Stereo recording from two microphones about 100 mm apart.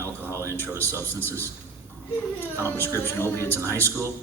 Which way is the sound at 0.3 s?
25° right (ahead or behind).